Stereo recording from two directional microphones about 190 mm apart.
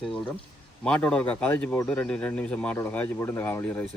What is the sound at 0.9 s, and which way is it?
Speech, 5° left (ahead or behind).